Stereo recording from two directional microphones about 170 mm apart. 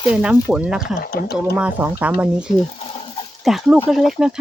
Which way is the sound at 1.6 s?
10° right (ahead or behind).